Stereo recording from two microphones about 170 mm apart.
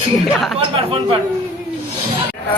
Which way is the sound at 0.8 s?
35° right (ahead or behind).